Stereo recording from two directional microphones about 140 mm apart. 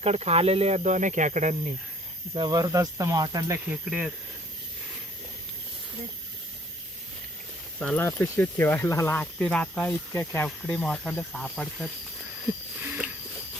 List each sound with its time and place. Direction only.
0.0 s speech: 50° right (ahead or behind)
2.3 s speech: 30° right (ahead or behind)
3.7 s speech: 5° right (ahead or behind)
7.8 s speech: 5° left (ahead or behind)
12.8 s a sound: 15° right (ahead or behind)